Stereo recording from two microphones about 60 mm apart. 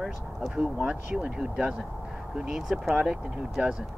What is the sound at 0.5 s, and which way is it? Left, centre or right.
Speech, right.